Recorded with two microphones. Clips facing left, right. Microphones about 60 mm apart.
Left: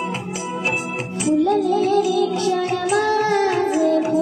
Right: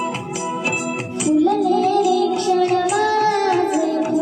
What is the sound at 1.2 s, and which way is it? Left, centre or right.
Music, left.